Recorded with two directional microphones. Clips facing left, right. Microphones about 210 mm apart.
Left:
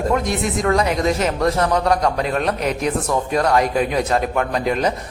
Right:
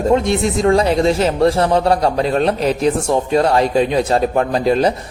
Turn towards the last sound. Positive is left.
turn(degrees=-30)  # may be behind; listen again after turning